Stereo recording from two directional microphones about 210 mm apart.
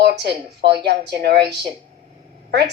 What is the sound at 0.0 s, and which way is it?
A woman's voice, 50° right (ahead or behind).